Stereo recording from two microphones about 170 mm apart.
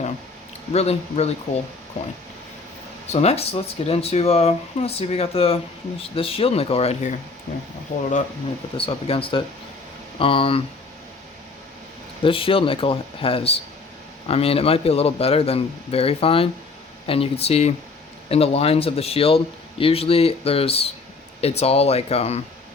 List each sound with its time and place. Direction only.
0.7 s speech: 40° left (ahead or behind)
3.1 s speech: 40° left (ahead or behind)
7.5 s speech: 65° left (ahead or behind)
7.9 s speech: 50° left (ahead or behind)
8.8 s speech: 30° left (ahead or behind)
12.2 s speech: 30° left (ahead or behind)